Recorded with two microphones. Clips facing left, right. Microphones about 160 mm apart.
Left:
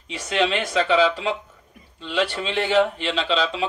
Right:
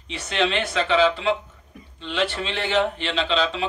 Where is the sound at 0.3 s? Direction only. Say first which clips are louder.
Left 2 dB; 40° left (ahead or behind).